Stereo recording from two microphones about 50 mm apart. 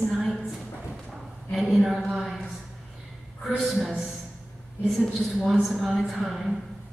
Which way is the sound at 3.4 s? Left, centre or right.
Centre.